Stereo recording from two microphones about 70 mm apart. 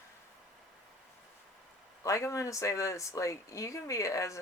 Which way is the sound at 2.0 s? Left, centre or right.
Left.